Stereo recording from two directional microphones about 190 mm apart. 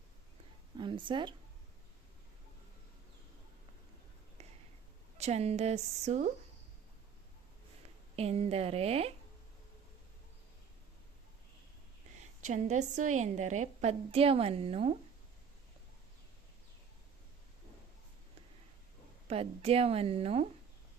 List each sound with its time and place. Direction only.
0.8 s a woman's voice: 25° right (ahead or behind)
4.4 s a sound: 35° right (ahead or behind)
5.1 s a woman's voice: 35° right (ahead or behind)
8.1 s a woman's voice: 35° right (ahead or behind)
12.4 s a woman's voice: 40° right (ahead or behind)
19.3 s a woman's voice: 30° right (ahead or behind)